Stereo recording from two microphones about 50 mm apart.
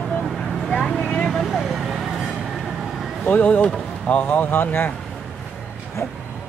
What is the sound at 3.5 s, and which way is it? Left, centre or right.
Speech, left.